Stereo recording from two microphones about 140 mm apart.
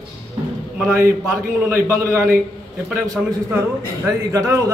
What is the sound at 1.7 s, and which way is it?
Speech, 20° right (ahead or behind).